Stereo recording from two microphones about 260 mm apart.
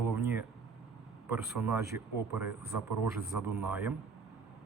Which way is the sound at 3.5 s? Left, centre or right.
Centre.